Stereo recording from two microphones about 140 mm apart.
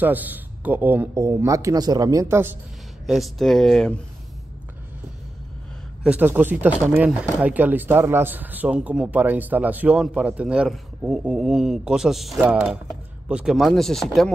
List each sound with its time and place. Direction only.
0.0 s speech: 10° right (ahead or behind)
3.1 s speech: centre (ahead or behind)
6.0 s a man's voice: 10° right (ahead or behind)